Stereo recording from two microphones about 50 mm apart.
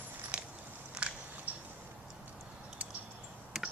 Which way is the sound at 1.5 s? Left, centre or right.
Right.